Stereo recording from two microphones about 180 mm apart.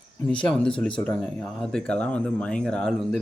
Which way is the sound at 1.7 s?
5° left (ahead or behind).